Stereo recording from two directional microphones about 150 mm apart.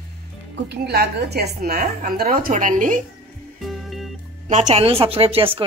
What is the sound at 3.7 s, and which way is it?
Music, centre (ahead or behind).